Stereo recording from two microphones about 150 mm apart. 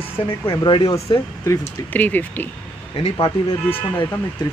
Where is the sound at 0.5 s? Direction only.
30° left (ahead or behind).